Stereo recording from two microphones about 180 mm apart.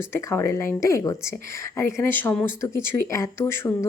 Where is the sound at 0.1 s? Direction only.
15° left (ahead or behind).